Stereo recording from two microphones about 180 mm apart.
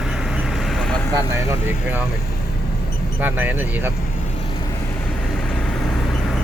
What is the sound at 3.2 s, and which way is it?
Speech, 10° right (ahead or behind).